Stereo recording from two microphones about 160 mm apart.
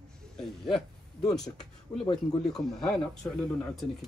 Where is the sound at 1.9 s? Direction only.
25° left (ahead or behind).